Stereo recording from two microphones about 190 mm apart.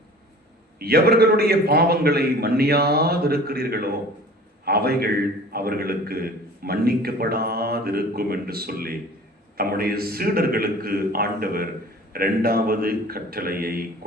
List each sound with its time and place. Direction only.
0.8 s a man's voice: 55° right (ahead or behind)